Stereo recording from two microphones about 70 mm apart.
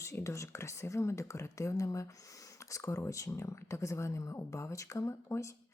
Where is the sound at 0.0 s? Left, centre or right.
Left.